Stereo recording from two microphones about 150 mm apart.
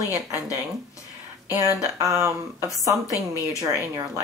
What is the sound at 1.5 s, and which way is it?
Speech, 20° right (ahead or behind).